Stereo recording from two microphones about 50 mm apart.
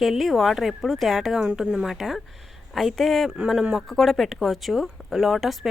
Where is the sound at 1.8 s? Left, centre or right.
Centre.